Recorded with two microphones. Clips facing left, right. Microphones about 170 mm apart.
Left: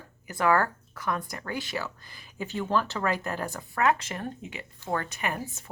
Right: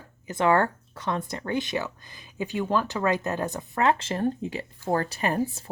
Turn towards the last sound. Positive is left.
turn(degrees=-35)  # may be behind; listen again after turning